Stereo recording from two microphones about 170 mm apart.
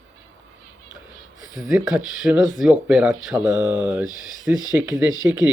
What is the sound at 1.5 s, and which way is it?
Speech, centre (ahead or behind).